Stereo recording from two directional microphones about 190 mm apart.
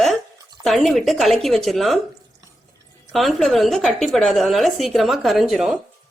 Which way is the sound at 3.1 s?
Centre (ahead or behind).